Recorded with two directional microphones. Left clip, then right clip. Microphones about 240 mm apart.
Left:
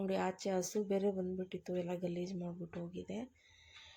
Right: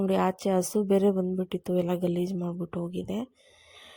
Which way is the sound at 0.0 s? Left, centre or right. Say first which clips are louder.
Right 11 dB; right.